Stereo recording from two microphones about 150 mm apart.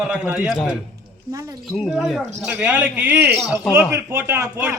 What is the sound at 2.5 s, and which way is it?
A man's voice, 10° right (ahead or behind).